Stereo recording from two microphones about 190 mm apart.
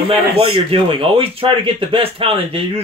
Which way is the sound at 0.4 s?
25° right (ahead or behind).